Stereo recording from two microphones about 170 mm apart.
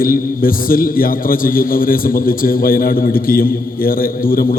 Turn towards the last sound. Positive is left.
turn(degrees=55)  # may be behind; listen again after turning